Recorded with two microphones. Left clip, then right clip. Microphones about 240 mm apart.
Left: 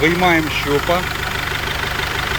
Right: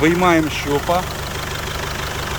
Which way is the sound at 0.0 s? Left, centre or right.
Centre.